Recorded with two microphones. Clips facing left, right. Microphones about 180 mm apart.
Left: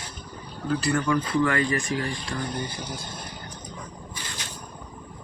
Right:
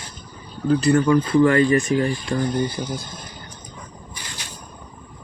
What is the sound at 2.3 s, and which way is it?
Speech, 35° right (ahead or behind).